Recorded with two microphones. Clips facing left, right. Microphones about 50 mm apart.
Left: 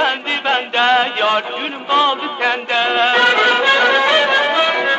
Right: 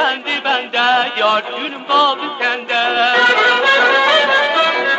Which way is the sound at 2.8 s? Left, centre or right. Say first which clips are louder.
Right 1 dB; centre.